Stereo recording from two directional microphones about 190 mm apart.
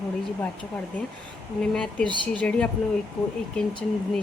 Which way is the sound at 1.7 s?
5° left (ahead or behind).